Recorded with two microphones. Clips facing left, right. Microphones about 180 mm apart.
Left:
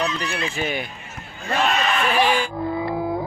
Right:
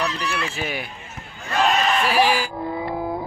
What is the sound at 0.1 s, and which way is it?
Speech, 65° right (ahead or behind).